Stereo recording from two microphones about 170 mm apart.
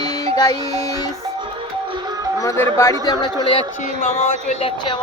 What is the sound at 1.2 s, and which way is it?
Music, 30° right (ahead or behind).